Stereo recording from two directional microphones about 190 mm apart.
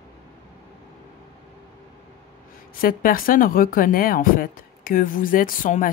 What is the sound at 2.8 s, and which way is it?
Speech, 45° left (ahead or behind).